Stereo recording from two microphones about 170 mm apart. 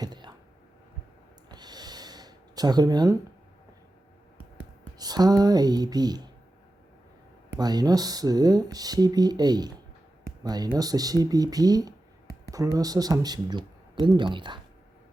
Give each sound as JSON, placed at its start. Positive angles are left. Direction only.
{"t": 0.0, "sound": "a sound", "side_deg": -25}
{"t": 1.5, "sound": "gasp", "side_deg": -25}
{"t": 4.9, "sound": "speech", "side_deg": -25}
{"t": 7.5, "sound": "speech", "side_deg": -25}